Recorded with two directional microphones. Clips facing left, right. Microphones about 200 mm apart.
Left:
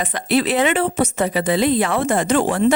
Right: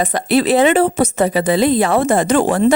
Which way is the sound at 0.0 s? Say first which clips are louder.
Right 4 dB; 40° right (ahead or behind).